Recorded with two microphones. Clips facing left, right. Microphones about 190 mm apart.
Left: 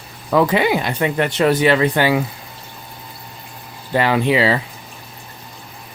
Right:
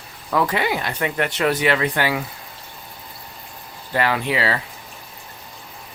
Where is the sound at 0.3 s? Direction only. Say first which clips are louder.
Left 6 dB; 20° left (ahead or behind).